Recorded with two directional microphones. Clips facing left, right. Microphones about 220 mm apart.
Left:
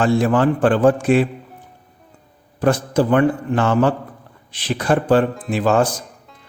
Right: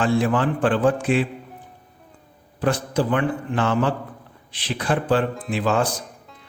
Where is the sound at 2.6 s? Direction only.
45° left (ahead or behind).